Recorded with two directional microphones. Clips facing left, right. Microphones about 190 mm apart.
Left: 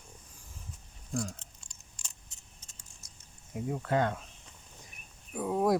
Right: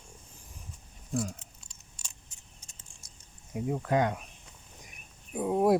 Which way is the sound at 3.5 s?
15° right (ahead or behind).